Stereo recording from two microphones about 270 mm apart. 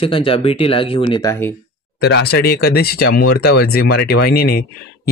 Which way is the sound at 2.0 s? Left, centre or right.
Left.